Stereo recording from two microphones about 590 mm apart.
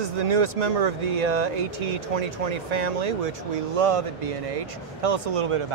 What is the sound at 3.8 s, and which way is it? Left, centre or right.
Speech, right.